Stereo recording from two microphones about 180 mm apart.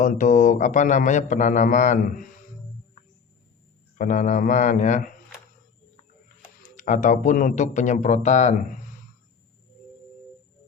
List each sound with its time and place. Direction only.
0.0 s speech: 45° left (ahead or behind)
3.9 s speech: 45° left (ahead or behind)
6.2 s speech: 45° left (ahead or behind)